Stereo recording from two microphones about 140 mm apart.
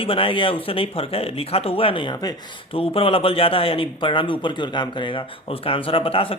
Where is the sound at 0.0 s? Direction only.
40° left (ahead or behind).